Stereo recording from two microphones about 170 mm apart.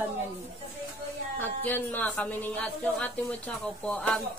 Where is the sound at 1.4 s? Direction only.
10° left (ahead or behind).